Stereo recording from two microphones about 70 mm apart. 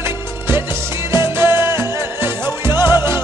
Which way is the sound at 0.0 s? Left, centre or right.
Right.